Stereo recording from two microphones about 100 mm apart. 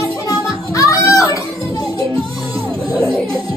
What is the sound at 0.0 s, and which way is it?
Music, 30° left (ahead or behind).